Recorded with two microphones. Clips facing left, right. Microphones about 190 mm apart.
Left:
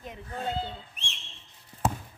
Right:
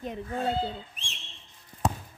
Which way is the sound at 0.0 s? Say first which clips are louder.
Right 5 dB; 30° right (ahead or behind).